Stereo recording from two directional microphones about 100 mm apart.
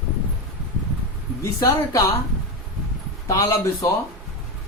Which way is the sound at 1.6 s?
35° left (ahead or behind).